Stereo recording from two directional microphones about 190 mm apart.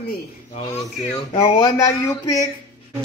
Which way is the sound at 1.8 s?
15° left (ahead or behind).